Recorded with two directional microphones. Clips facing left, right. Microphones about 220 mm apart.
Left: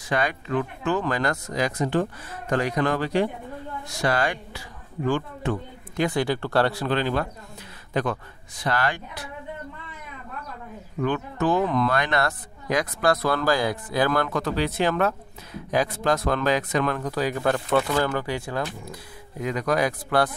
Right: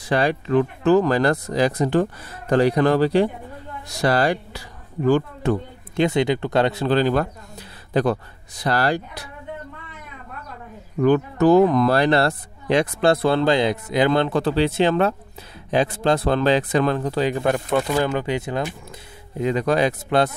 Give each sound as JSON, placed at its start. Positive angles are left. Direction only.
{"t": 0.1, "sound": "speech", "side_deg": -35}
{"t": 5.9, "sound": "speech", "side_deg": -25}
{"t": 6.9, "sound": "a man's voice", "side_deg": -40}
{"t": 11.0, "sound": "speech", "side_deg": -40}